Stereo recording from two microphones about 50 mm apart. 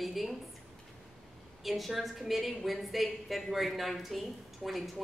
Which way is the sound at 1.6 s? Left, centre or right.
Centre.